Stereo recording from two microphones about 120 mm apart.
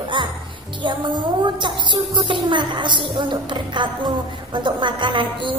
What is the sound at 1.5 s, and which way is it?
A woman's voice, 40° right (ahead or behind).